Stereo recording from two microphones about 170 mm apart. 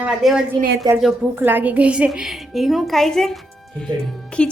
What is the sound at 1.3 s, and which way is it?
Speech, 10° right (ahead or behind).